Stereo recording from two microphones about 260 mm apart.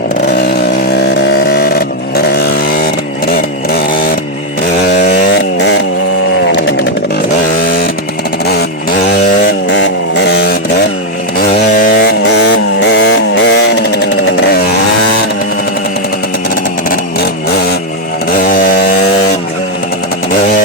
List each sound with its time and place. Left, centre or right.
1.3 s chainsaw: left
5.1 s chainsaw: left
9.7 s chainsaw: left
11.8 s chainsaw: left